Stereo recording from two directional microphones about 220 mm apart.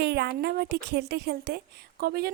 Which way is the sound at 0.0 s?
50° right (ahead or behind).